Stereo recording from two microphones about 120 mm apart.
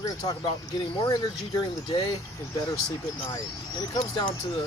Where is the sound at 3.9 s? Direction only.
40° left (ahead or behind).